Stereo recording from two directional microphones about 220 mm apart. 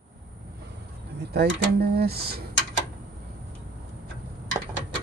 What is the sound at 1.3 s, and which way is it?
Speech, 45° right (ahead or behind).